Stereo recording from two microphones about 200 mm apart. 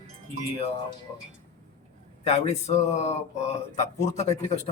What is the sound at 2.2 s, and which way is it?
Speech, 30° left (ahead or behind).